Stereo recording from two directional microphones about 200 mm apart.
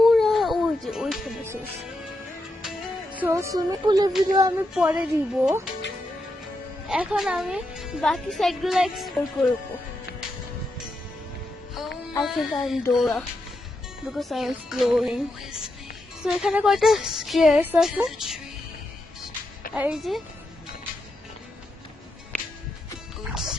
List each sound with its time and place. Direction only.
0.0 s music: centre (ahead or behind)
3.2 s a woman's voice: 15° right (ahead or behind)
4.7 s speech: 5° right (ahead or behind)
6.8 s speech: 5° right (ahead or behind)
12.2 s speech: centre (ahead or behind)
19.7 s speech: 5° right (ahead or behind)
23.2 s music: centre (ahead or behind)